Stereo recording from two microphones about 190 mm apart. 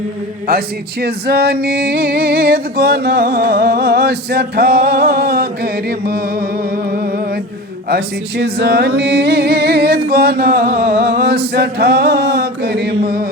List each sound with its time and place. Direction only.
1.0 s male singing: 55° right (ahead or behind)
7.9 s male singing: 60° right (ahead or behind)